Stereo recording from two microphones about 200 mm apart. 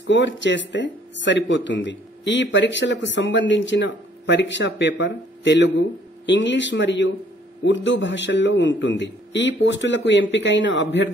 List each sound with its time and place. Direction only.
0.0 s speech: 65° left (ahead or behind)